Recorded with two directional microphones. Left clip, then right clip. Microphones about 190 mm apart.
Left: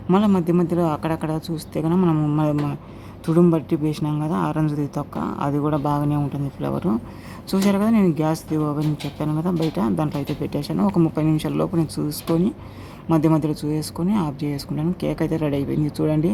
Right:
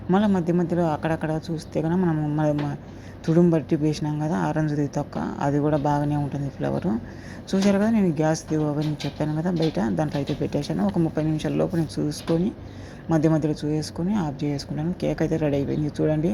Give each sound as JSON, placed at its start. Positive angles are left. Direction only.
{"t": 0.3, "sound": "speech", "side_deg": 5}
{"t": 2.0, "sound": "speech", "side_deg": 15}
{"t": 2.4, "sound": "speech", "side_deg": 0}